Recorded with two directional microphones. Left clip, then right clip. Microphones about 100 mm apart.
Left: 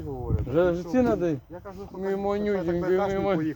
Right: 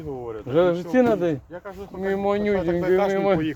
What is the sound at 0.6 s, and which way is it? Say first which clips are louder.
Speech: right 4 dB; 40° right (ahead or behind).